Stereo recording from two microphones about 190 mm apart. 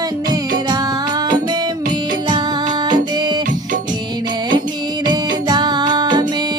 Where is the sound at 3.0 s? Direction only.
20° right (ahead or behind).